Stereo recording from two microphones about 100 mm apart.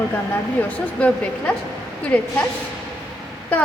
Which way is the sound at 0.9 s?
10° left (ahead or behind).